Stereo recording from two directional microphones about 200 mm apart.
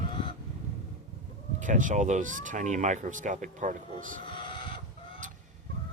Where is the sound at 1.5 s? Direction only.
40° right (ahead or behind).